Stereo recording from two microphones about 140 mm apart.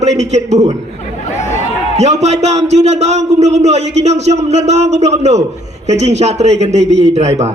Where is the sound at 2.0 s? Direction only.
55° right (ahead or behind).